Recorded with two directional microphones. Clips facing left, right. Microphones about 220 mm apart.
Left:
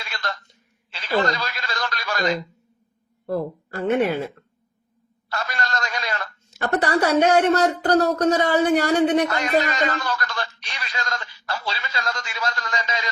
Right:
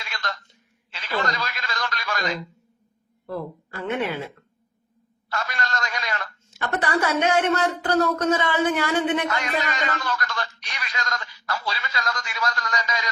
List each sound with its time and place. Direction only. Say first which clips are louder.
0.1 s a sound: left 2 dB; 35° left (ahead or behind)
3.2 s a woman's voice: left 6 dB; 40° left (ahead or behind)
5.3 s speech: left 2 dB; 35° left (ahead or behind)